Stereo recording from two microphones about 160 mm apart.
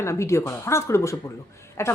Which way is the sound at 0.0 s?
15° left (ahead or behind).